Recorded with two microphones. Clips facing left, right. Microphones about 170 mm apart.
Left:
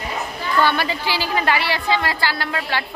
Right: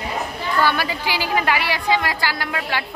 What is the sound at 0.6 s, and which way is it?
A woman's voice, 10° right (ahead or behind).